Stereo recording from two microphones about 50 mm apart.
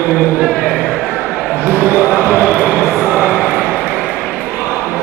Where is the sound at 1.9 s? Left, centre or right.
Right.